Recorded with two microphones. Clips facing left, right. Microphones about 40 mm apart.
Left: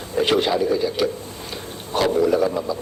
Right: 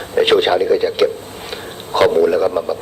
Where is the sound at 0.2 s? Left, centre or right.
Right.